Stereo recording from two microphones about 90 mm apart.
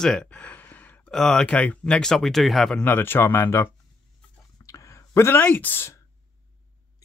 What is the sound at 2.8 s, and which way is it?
Speech, 20° left (ahead or behind).